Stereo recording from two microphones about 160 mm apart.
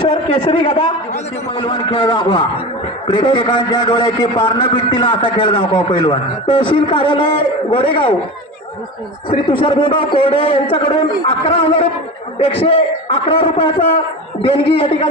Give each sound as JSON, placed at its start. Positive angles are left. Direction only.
{"t": 0.0, "sound": "a man's voice", "side_deg": 30}
{"t": 9.3, "sound": "a man's voice", "side_deg": 35}